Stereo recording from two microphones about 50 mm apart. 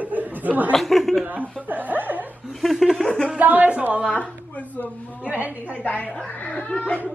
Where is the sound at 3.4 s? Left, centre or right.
Right.